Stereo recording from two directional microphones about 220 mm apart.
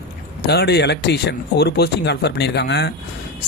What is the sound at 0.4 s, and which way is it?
Speech, 50° left (ahead or behind).